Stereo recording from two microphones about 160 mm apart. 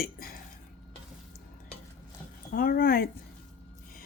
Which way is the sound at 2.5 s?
65° left (ahead or behind).